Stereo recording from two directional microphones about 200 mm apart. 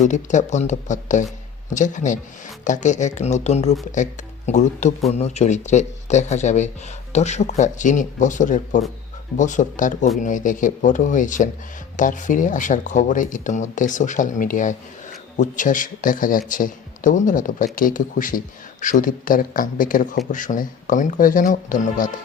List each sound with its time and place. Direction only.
0.0 s speech: 40° left (ahead or behind)